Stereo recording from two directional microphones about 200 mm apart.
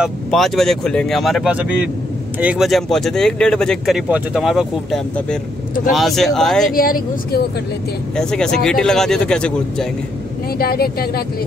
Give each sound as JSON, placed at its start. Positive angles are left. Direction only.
{"t": 0.0, "sound": "speech", "side_deg": 0}
{"t": 6.7, "sound": "speech", "side_deg": 45}
{"t": 8.2, "sound": "speech", "side_deg": 5}
{"t": 10.6, "sound": "speech", "side_deg": 50}